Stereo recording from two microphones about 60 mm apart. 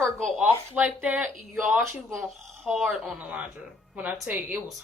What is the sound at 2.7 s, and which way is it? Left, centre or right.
Speech, centre.